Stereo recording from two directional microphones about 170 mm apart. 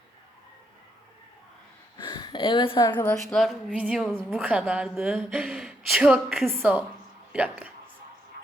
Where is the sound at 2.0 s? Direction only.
30° left (ahead or behind).